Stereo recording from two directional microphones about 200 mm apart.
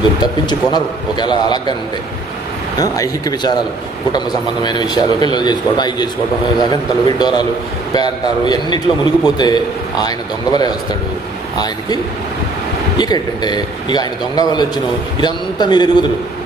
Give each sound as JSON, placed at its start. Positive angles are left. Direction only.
{"t": 0.2, "sound": "a man's voice", "side_deg": 20}
{"t": 2.8, "sound": "a man's voice", "side_deg": 20}
{"t": 12.9, "sound": "a man's voice", "side_deg": 20}